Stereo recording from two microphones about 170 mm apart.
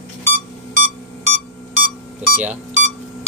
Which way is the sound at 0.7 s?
45° right (ahead or behind).